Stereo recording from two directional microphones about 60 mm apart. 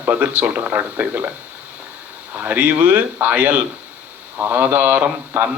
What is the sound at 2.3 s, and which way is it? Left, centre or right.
Speech, right.